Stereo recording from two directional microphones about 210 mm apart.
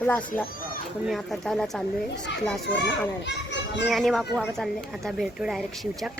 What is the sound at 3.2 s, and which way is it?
Children playing, 55° left (ahead or behind).